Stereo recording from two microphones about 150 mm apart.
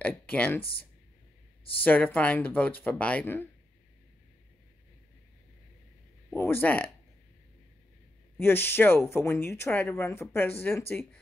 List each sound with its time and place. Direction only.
0.0 s speech: 10° left (ahead or behind)
6.3 s speech: 15° left (ahead or behind)
8.4 s speech: 15° left (ahead or behind)